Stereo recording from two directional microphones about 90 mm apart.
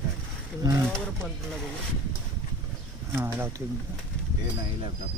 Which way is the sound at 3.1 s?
25° right (ahead or behind).